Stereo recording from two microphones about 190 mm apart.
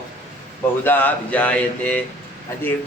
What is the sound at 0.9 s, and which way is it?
A man's voice, 10° left (ahead or behind).